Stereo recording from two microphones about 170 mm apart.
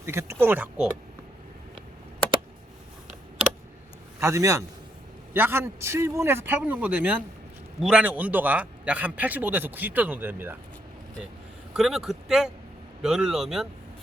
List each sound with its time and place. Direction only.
0.0 s a man's voice: 15° right (ahead or behind)
4.2 s a man's voice: 20° right (ahead or behind)
11.7 s speech: 5° right (ahead or behind)